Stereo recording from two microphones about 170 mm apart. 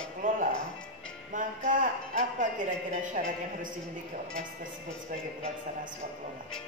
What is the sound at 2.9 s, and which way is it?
Speech, 50° right (ahead or behind).